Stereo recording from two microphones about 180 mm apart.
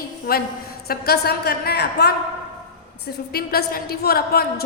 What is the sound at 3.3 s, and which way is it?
A woman's voice, 60° left (ahead or behind).